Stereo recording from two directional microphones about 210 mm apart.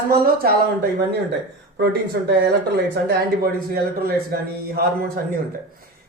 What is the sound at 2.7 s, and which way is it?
Speech, 50° right (ahead or behind).